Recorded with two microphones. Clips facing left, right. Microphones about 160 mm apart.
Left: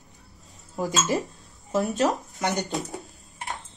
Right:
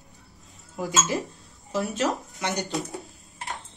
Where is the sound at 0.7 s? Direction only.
40° left (ahead or behind).